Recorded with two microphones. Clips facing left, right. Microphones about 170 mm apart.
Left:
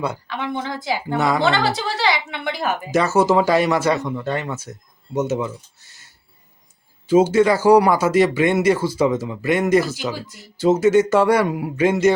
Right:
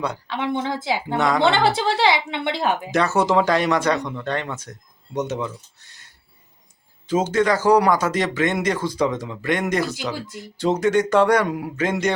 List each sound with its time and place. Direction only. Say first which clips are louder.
0.3 s speech: right 2 dB; 20° right (ahead or behind)
1.1 s speech: left 1 dB; 5° left (ahead or behind)
1.4 s speech: right 1 dB; 25° right (ahead or behind)
2.9 s speech: left 4 dB; centre (ahead or behind)
7.1 s speech: left 5 dB; 10° left (ahead or behind)